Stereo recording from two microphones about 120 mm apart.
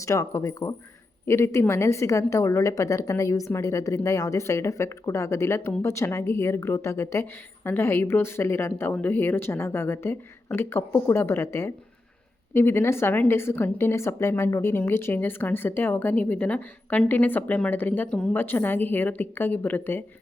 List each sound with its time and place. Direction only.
0.0 s a woman's voice: 25° left (ahead or behind)